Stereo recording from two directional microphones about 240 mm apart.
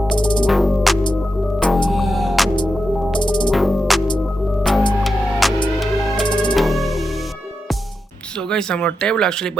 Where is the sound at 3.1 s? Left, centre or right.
Centre.